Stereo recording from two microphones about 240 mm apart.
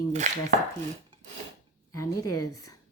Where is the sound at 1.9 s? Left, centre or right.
Centre.